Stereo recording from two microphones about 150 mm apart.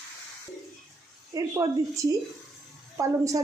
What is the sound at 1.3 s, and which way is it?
A woman's voice, 20° right (ahead or behind).